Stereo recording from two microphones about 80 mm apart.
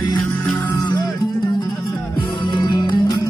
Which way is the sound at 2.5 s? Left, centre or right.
Left.